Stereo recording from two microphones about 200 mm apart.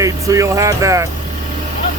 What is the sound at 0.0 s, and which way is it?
Speech, 15° right (ahead or behind).